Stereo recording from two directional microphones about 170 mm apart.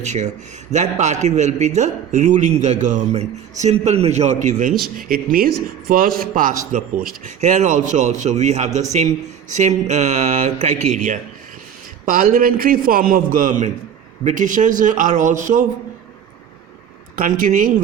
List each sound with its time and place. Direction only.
0.0 s a man's voice: 45° right (ahead or behind)
17.2 s a man's voice: 55° right (ahead or behind)